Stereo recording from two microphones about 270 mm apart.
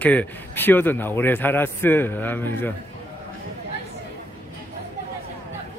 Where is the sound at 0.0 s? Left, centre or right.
Centre.